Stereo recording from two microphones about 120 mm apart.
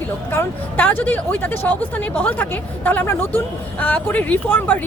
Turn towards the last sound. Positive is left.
turn(degrees=15)  # may be behind; listen again after turning